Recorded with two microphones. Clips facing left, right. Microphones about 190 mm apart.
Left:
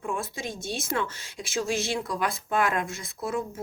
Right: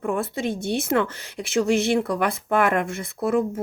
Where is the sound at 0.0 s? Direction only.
60° right (ahead or behind).